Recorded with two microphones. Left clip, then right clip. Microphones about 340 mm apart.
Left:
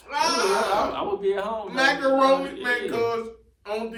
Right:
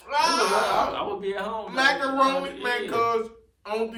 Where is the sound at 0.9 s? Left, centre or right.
Centre.